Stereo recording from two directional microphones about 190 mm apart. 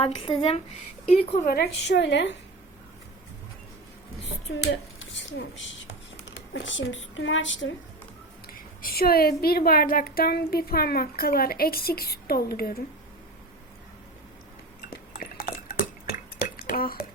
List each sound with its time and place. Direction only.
0.0 s speech: 30° left (ahead or behind)
1.5 s a woman's voice: 60° left (ahead or behind)
4.6 s speech: 65° left (ahead or behind)
8.5 s a woman's voice: 50° left (ahead or behind)
15.2 s dishes: 50° left (ahead or behind)